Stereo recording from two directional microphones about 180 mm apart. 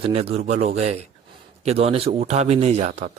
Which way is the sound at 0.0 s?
30° right (ahead or behind).